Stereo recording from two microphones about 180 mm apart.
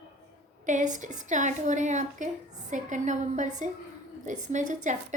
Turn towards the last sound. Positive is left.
turn(degrees=-45)  # may be behind; listen again after turning